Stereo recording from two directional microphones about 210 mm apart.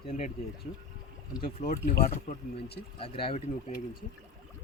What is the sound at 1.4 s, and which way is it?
Speech, 40° left (ahead or behind).